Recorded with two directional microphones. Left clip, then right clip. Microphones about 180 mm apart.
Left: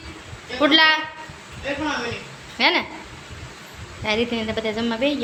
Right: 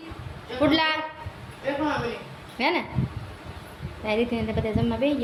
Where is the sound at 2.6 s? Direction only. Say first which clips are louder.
Left 6 dB; centre (ahead or behind).